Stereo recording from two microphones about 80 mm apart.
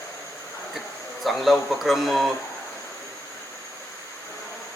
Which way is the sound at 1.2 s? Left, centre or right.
Centre.